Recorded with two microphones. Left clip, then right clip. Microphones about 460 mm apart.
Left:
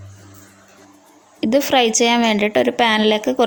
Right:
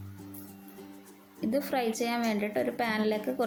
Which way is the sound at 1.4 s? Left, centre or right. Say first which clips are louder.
Left 15 dB; left.